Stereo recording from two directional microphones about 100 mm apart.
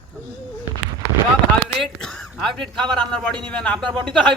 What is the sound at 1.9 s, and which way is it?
Speech, 5° left (ahead or behind).